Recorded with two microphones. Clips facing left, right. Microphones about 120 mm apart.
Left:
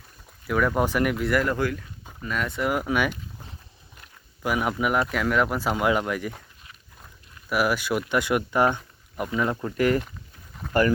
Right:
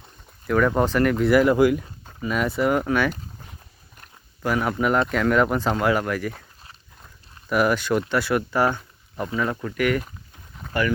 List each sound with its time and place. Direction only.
0.4 s speech: 5° left (ahead or behind)
1.2 s speech: 5° right (ahead or behind)
4.4 s speech: 10° left (ahead or behind)
7.5 s speech: 5° left (ahead or behind); by 10.0 s 30° left (ahead or behind)
10.6 s a sound: 5° left (ahead or behind)